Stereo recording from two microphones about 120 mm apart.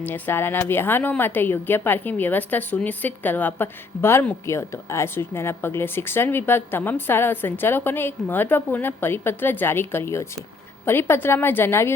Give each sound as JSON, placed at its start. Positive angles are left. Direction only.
{"t": 0.0, "sound": "a woman's voice", "side_deg": 15}